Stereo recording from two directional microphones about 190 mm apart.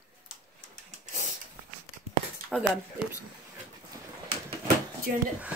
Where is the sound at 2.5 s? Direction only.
10° right (ahead or behind).